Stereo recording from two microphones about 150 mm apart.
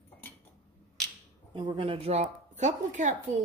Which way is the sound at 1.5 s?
35° right (ahead or behind).